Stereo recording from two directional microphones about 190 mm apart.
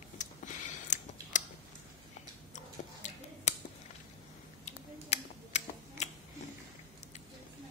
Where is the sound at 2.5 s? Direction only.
40° left (ahead or behind).